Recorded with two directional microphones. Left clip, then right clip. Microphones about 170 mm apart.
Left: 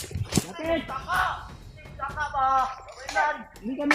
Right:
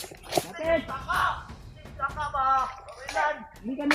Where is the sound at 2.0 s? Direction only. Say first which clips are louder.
Right 3 dB; 5° right (ahead or behind).